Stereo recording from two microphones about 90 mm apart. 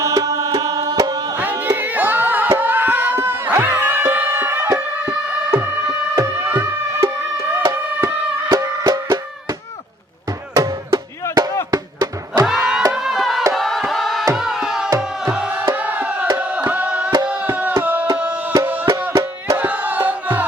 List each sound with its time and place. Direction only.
0.0 s music: 40° right (ahead or behind)
1.4 s a sound: 20° right (ahead or behind)
6.4 s music: 20° right (ahead or behind)
7.7 s music: 40° right (ahead or behind)
10.5 s music: 40° right (ahead or behind)
12.5 s crowd: 5° right (ahead or behind)
12.9 s a sound: 5° right (ahead or behind)
13.5 s music: centre (ahead or behind); by 16.3 s 15° right (ahead or behind)
16.4 s tabla: 15° right (ahead or behind)
18.6 s music: 20° right (ahead or behind)
19.5 s music: 20° right (ahead or behind)